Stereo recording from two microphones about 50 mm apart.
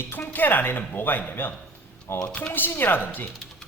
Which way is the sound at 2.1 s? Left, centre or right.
Left.